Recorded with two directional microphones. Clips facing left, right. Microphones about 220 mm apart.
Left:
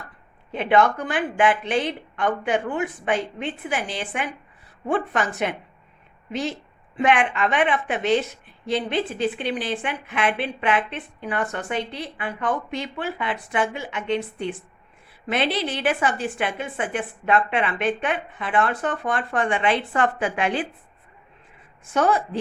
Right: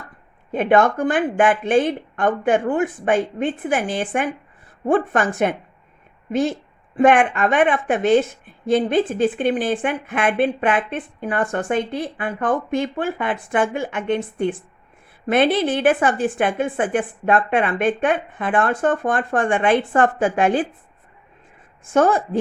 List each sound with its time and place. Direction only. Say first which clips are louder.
0.5 s a woman's voice: right 3 dB; 50° right (ahead or behind)
21.8 s a woman's voice: right 4 dB; 50° right (ahead or behind)